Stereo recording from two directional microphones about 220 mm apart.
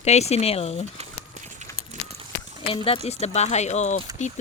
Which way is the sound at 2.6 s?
25° left (ahead or behind).